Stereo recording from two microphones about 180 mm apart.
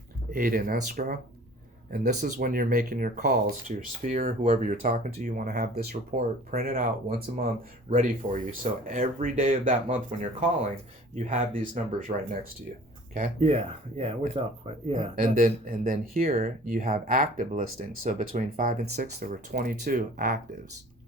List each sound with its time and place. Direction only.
0.3 s speech: 50° right (ahead or behind)
7.9 s speech: 45° right (ahead or behind)
13.4 s speech: 35° right (ahead or behind)
15.2 s speech: 50° right (ahead or behind)